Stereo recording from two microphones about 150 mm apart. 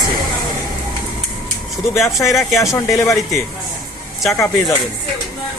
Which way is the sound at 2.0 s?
20° left (ahead or behind).